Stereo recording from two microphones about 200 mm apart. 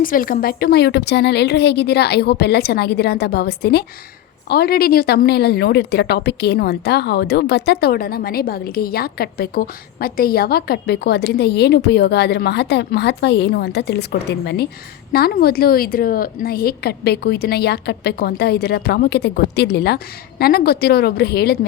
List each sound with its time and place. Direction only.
0.0 s a woman's voice: 45° left (ahead or behind)